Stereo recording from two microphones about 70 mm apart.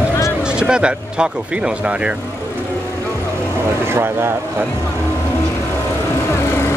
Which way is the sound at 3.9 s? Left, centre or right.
Right.